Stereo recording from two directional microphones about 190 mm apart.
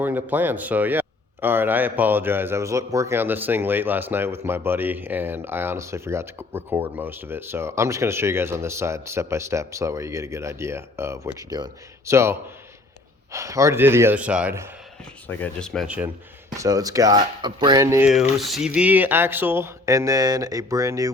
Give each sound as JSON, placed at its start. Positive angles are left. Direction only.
{"t": 0.0, "sound": "speech", "side_deg": -10}
{"t": 15.3, "sound": "speech", "side_deg": 5}
{"t": 16.6, "sound": "speech", "side_deg": -20}
{"t": 18.1, "sound": "speech", "side_deg": 0}